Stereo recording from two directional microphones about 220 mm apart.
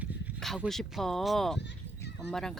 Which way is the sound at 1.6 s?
50° left (ahead or behind).